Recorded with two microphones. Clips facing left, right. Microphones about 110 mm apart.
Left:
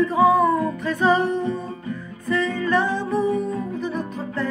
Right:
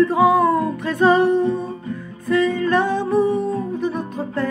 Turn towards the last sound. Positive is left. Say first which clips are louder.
# right 3 dB
turn(degrees=-55)  # may be behind; listen again after turning